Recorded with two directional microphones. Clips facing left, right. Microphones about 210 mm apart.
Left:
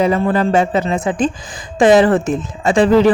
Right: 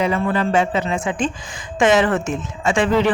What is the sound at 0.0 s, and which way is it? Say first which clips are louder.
Speech: left 5 dB; 40° left (ahead or behind).